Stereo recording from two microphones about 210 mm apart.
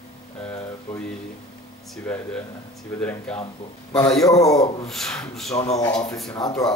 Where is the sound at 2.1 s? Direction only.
5° left (ahead or behind).